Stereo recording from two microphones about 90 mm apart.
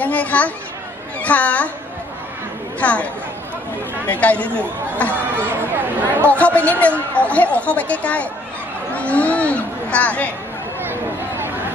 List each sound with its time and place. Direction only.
0.0 s speech: 15° left (ahead or behind)
2.8 s speech: 15° left (ahead or behind)
4.1 s speech: 15° left (ahead or behind)
5.1 s speech: 25° right (ahead or behind)
6.2 s speech: 15° left (ahead or behind)
8.9 s chatter: 15° left (ahead or behind)
10.8 s chatter: 25° right (ahead or behind)